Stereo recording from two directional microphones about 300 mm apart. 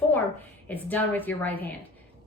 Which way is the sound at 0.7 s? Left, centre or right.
Centre.